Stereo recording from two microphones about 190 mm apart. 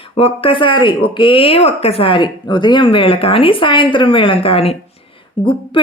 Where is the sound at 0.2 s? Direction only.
30° left (ahead or behind).